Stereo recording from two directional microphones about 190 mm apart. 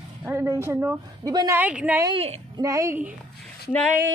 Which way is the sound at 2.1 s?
30° right (ahead or behind).